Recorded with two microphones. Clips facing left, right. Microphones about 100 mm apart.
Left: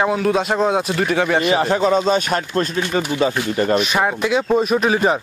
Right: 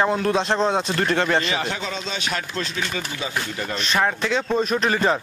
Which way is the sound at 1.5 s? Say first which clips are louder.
Left 11 dB; 40° left (ahead or behind).